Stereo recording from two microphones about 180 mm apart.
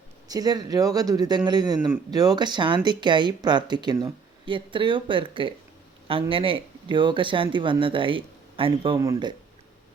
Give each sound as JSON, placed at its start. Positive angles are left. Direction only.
{"t": 0.3, "sound": "speech", "side_deg": -20}